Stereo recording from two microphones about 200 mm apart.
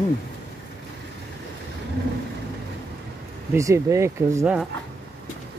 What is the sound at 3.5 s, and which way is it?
Speech, 15° right (ahead or behind).